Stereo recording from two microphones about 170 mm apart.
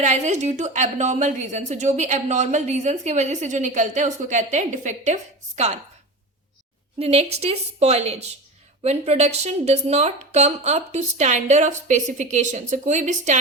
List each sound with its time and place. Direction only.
0.0 s a woman's voice: 45° right (ahead or behind)
7.0 s a woman's voice: 35° right (ahead or behind)